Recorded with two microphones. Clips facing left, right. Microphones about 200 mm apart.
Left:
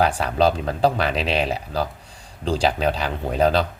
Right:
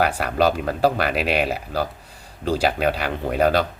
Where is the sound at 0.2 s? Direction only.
10° right (ahead or behind).